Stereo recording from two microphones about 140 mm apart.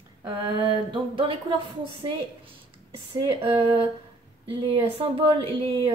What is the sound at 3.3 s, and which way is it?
Speech, 40° right (ahead or behind).